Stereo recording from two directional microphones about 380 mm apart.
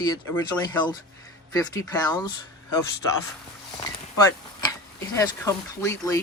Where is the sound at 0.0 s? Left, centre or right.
Centre.